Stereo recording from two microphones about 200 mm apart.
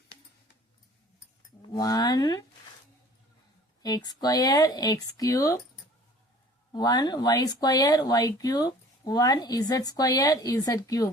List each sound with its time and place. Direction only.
1.6 s speech: 20° left (ahead or behind)
3.8 s speech: 20° left (ahead or behind)
6.7 s speech: 20° left (ahead or behind)